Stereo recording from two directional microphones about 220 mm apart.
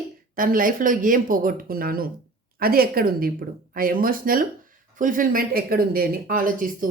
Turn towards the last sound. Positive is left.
turn(degrees=-40)  # may be behind; listen again after turning